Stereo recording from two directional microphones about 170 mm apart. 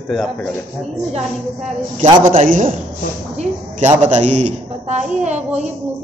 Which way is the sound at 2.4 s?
50° right (ahead or behind).